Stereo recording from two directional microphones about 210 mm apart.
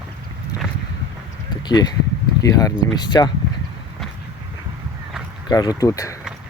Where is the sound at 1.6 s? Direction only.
20° left (ahead or behind).